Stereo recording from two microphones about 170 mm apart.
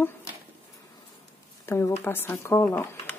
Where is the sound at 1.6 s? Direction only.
15° left (ahead or behind).